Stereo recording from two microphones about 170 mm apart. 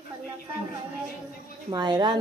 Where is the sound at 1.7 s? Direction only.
25° right (ahead or behind).